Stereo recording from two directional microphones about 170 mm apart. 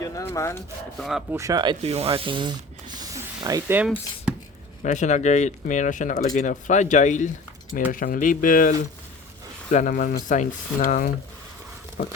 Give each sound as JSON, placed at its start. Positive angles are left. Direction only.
{"t": 0.0, "sound": "speech", "side_deg": 15}
{"t": 0.9, "sound": "speech", "side_deg": 0}
{"t": 1.3, "sound": "speech", "side_deg": -20}
{"t": 1.8, "sound": "speech", "side_deg": -35}
{"t": 4.3, "sound": "a sound", "side_deg": -5}
{"t": 4.8, "sound": "speech", "side_deg": 45}
{"t": 7.9, "sound": "speech", "side_deg": 55}
{"t": 9.7, "sound": "speech", "side_deg": 50}